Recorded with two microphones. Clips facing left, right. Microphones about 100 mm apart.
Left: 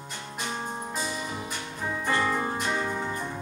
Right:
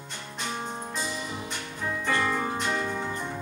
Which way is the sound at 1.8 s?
20° left (ahead or behind).